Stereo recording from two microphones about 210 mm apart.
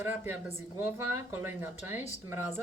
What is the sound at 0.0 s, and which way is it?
Speech, 10° right (ahead or behind).